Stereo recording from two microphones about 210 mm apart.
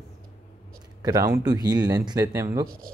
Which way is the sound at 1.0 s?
15° right (ahead or behind).